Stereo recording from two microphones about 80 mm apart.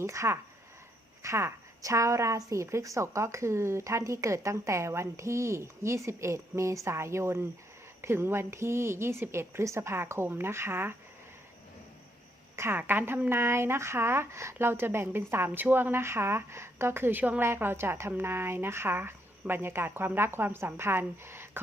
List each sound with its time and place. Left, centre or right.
0.0 s a woman's voice: right
12.5 s speech: right
21.2 s a sound: right